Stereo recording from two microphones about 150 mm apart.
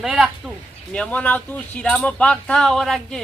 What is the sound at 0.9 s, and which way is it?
Speech, 5° left (ahead or behind).